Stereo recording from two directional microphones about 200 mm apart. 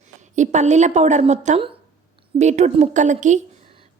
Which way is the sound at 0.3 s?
35° right (ahead or behind).